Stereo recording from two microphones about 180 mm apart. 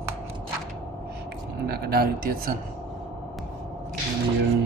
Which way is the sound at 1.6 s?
60° right (ahead or behind).